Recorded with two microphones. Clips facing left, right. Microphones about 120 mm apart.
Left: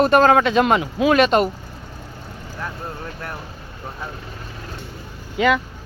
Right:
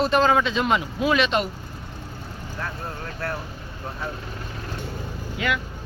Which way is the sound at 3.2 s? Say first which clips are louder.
Right 5 dB; 15° left (ahead or behind).